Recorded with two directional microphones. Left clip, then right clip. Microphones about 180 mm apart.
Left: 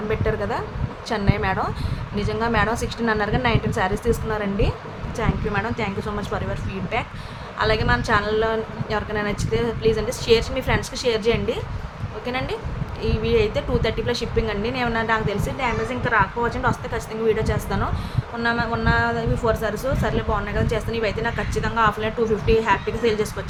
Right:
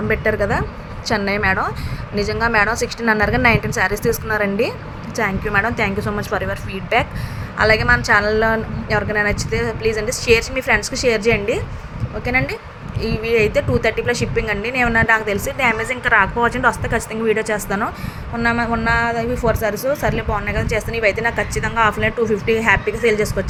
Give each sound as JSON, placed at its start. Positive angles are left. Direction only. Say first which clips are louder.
{"t": 0.1, "sound": "a woman's voice", "louder": "right 6 dB", "side_deg": -30}
{"t": 13.0, "sound": "speech", "louder": "right 3 dB", "side_deg": -90}
{"t": 13.3, "sound": "a woman's voice", "louder": "right 5 dB", "side_deg": -30}